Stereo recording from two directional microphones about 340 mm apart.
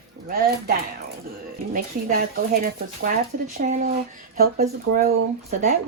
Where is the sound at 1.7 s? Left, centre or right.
Right.